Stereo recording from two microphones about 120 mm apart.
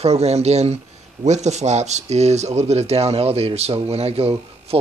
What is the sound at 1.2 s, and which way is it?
A man's voice, 75° right (ahead or behind).